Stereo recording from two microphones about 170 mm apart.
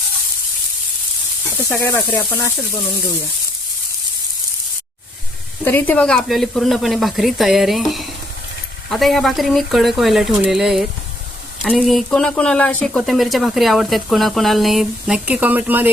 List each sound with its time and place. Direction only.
1.7 s speech: 15° left (ahead or behind)
5.6 s speech: 10° left (ahead or behind); by 15.9 s 10° right (ahead or behind)